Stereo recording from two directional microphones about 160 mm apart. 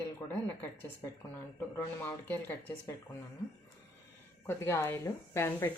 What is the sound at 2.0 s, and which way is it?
Speech, 10° left (ahead or behind).